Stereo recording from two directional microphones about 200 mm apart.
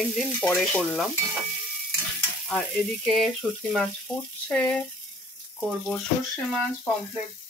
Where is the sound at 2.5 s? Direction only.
5° left (ahead or behind).